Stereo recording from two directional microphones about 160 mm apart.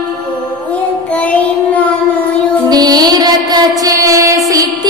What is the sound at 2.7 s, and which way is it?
Mantra, 25° right (ahead or behind).